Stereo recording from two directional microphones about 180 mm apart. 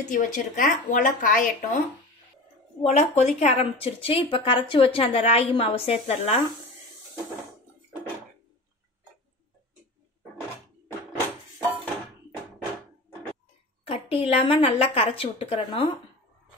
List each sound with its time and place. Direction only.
0.0 s speech: 45° left (ahead or behind)
2.8 s a woman's voice: 35° left (ahead or behind)
13.8 s a woman's voice: 35° left (ahead or behind)